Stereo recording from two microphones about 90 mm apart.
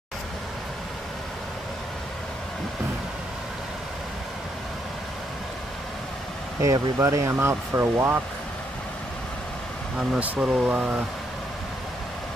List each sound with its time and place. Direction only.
6.6 s speech: 35° right (ahead or behind)
9.9 s speech: 15° right (ahead or behind)